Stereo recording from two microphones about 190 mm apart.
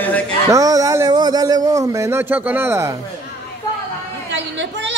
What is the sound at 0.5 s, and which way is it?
Speech, 20° right (ahead or behind).